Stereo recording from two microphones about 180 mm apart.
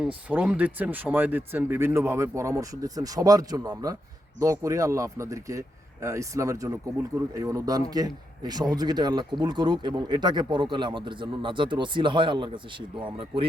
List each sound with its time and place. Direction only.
0.0 s speech: 10° right (ahead or behind); by 13.5 s 30° right (ahead or behind)